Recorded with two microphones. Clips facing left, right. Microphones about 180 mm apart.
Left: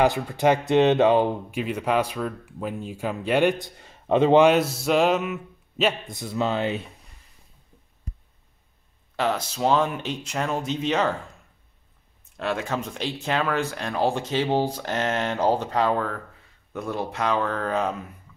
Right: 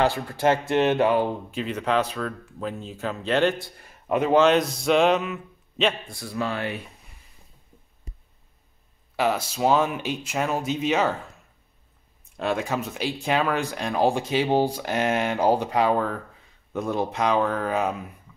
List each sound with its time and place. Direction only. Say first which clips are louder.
0.0 s speech: left 2 dB; 20° left (ahead or behind)
4.4 s speech: left 1 dB; 5° left (ahead or behind)
6.0 s speech: left 3 dB; 20° left (ahead or behind)
9.1 s speech: right 1 dB; 10° right (ahead or behind)
12.4 s speech: right 1 dB; 15° right (ahead or behind)